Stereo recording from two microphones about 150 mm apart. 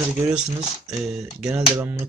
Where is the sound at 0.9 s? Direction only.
5° right (ahead or behind).